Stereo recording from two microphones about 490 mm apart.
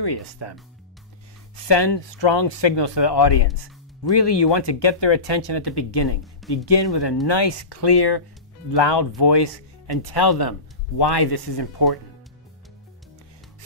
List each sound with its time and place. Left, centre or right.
0.0 s speech: left
1.6 s speech: left